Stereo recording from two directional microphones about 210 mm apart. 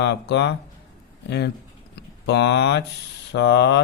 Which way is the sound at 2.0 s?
55° left (ahead or behind).